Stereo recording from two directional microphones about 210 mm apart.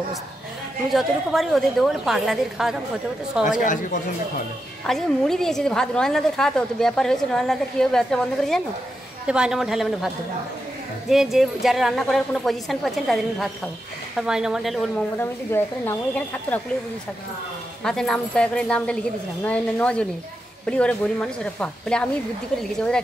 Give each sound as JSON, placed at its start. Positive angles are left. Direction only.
{"t": 0.9, "sound": "a woman's voice", "side_deg": 0}
{"t": 3.4, "sound": "speech", "side_deg": 40}
{"t": 4.8, "sound": "a woman's voice", "side_deg": 0}
{"t": 11.1, "sound": "a woman's voice", "side_deg": 0}
{"t": 17.8, "sound": "a woman's voice", "side_deg": 5}